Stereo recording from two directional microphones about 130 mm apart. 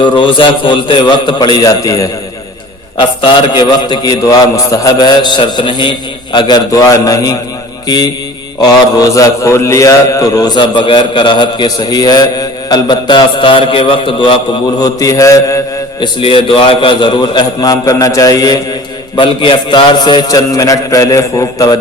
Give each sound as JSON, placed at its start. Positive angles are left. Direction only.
{"t": 0.0, "sound": "a man's voice", "side_deg": 40}
{"t": 3.0, "sound": "a man's voice", "side_deg": 40}
{"t": 14.8, "sound": "a man's voice", "side_deg": 30}
{"t": 16.0, "sound": "a man's voice", "side_deg": 40}